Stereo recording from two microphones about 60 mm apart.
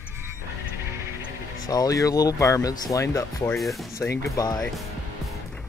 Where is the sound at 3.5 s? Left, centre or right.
Centre.